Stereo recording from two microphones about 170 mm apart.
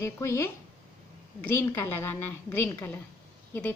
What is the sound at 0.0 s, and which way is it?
Speech, 15° left (ahead or behind).